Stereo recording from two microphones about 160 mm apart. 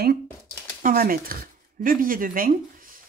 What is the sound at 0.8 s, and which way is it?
Speech, 65° right (ahead or behind).